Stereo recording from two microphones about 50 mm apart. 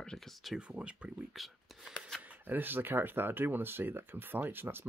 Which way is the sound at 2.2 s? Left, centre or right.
Right.